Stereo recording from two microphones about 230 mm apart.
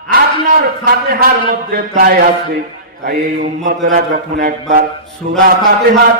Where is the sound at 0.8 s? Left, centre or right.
Right.